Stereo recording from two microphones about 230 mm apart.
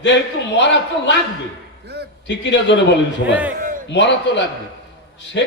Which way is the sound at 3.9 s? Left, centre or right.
Left.